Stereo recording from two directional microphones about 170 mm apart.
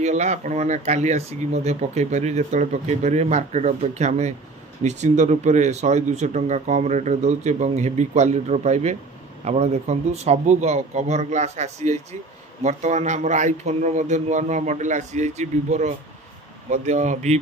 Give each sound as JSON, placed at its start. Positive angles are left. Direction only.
{"t": 0.0, "sound": "speech", "side_deg": -45}